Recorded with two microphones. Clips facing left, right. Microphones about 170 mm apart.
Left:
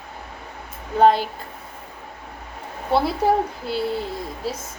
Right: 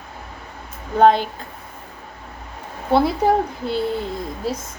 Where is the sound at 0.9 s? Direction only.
5° left (ahead or behind).